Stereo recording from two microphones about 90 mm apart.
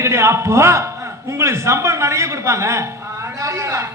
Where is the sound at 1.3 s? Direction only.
30° right (ahead or behind).